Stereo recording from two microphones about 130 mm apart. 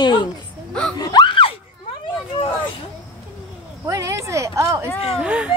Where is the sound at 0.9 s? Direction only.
30° left (ahead or behind).